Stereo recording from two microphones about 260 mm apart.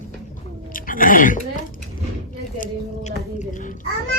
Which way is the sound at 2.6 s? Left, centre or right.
Left.